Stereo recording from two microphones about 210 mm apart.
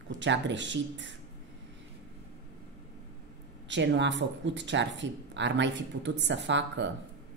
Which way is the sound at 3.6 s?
60° right (ahead or behind).